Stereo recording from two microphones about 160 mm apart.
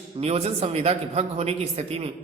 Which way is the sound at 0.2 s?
40° right (ahead or behind).